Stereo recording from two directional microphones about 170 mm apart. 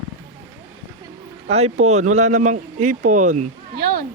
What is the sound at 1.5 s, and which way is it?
Speech, 40° right (ahead or behind).